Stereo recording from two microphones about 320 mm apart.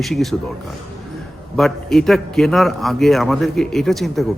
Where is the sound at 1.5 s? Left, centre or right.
Centre.